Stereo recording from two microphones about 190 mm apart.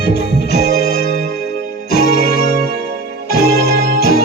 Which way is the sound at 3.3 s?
55° left (ahead or behind).